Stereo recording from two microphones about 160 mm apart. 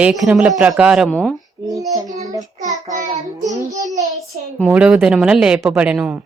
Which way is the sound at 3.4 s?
20° right (ahead or behind).